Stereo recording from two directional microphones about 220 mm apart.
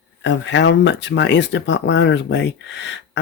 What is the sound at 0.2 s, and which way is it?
Speech, 55° left (ahead or behind).